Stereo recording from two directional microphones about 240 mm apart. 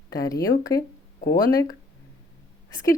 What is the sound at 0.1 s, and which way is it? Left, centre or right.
Speech, centre.